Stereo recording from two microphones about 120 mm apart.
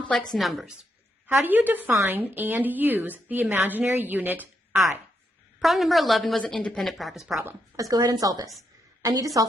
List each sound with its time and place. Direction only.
0.3 s a woman's voice: centre (ahead or behind)
1.3 s a woman's voice: 15° right (ahead or behind)
5.5 s a woman's voice: centre (ahead or behind)
7.3 s a woman's voice: 25° right (ahead or behind)